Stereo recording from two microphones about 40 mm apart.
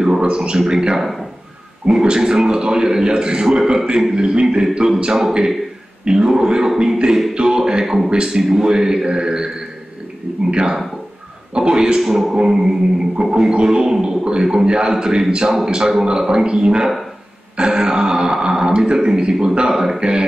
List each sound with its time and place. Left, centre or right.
0.0 s a man's voice: centre
4.7 s speech: centre
5.0 s a man's voice: right; by 7.0 s centre
7.3 s a man's voice: centre
7.8 s a man's voice: centre
10.5 s a man's voice: right
12.0 s speech: centre
12.4 s a man's voice: centre
14.2 s a man's voice: centre
19.7 s speech: centre
20.0 s a man's voice: right